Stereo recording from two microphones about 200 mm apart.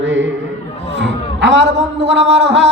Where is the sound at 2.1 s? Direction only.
60° right (ahead or behind).